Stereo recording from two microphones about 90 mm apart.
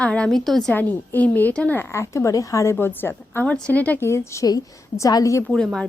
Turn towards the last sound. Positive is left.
turn(degrees=5)  # may be behind; listen again after turning